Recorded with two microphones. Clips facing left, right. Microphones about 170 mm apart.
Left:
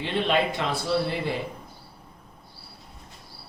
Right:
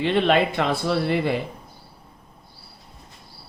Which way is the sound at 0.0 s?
60° right (ahead or behind).